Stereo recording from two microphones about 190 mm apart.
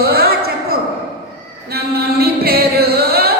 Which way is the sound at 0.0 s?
55° right (ahead or behind).